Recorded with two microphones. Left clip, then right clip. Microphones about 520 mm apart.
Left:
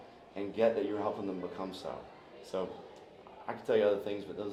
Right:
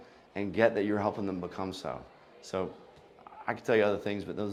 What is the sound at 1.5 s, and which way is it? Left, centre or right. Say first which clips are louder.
Speech: right 3 dB; right.